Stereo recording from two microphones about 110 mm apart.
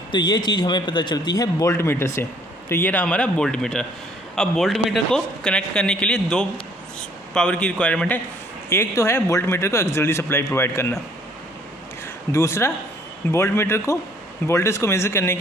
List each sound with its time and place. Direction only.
0.1 s a man's voice: 40° left (ahead or behind); by 8.2 s 15° left (ahead or behind)
8.7 s a man's voice: 25° left (ahead or behind)
12.3 s a man's voice: 25° left (ahead or behind)